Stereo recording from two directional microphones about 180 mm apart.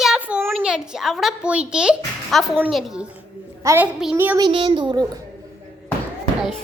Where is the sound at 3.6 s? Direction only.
15° right (ahead or behind).